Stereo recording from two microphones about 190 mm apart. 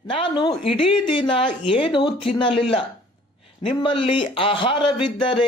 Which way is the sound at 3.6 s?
25° left (ahead or behind).